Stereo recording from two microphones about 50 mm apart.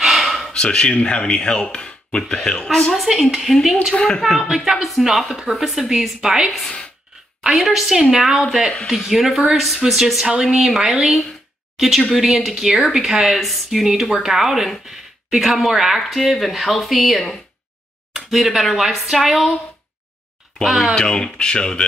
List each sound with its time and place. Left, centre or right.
0.0 s gasp: centre
0.5 s speech: centre
3.1 s speech: centre
3.9 s speech: centre
4.2 s speech: centre
6.6 s speech: left
7.4 s speech: centre
18.1 s a sound: centre
18.6 s speech: centre
20.6 s speech: centre
20.9 s speech: centre